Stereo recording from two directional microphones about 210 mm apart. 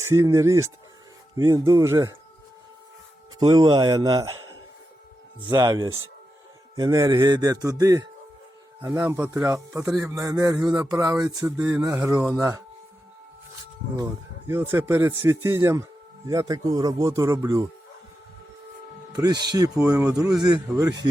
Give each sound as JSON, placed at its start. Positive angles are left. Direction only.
{"t": 0.0, "sound": "a man's voice", "side_deg": -15}
{"t": 3.3, "sound": "a man's voice", "side_deg": -20}
{"t": 11.5, "sound": "a man's voice", "side_deg": -5}
{"t": 13.9, "sound": "a man's voice", "side_deg": -15}
{"t": 19.1, "sound": "a man's voice", "side_deg": -20}